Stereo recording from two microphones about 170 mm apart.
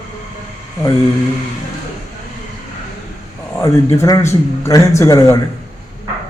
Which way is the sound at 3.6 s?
15° left (ahead or behind).